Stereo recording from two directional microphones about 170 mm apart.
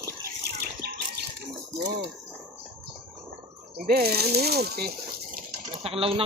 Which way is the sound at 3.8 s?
65° right (ahead or behind).